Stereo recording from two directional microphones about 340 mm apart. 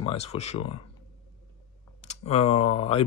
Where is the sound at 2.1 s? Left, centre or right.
Centre.